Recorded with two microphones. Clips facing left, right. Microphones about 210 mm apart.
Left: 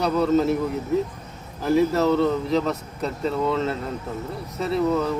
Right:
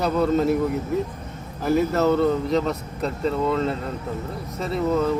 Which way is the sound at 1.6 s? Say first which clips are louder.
Even; centre (ahead or behind).